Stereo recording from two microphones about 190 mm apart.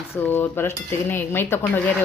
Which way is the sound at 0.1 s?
10° left (ahead or behind).